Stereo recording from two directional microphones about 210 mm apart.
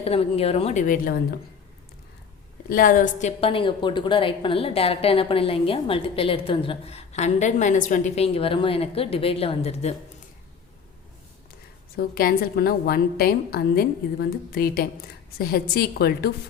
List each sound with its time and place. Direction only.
0.0 s a woman's voice: 30° left (ahead or behind)
2.6 s a woman's voice: 40° left (ahead or behind)
11.9 s a woman's voice: 45° left (ahead or behind)